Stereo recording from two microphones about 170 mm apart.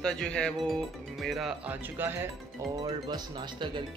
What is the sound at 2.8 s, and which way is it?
Speech, 25° right (ahead or behind).